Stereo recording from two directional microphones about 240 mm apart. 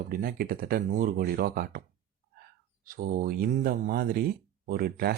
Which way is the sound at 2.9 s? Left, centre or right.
Right.